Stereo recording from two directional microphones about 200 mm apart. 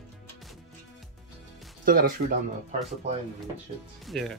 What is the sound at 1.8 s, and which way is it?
Music, 45° right (ahead or behind).